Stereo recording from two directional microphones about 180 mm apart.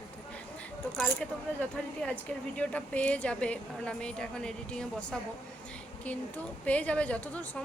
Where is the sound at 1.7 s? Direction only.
5° left (ahead or behind).